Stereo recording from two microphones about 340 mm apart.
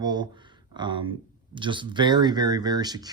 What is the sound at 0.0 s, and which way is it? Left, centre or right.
Speech, centre.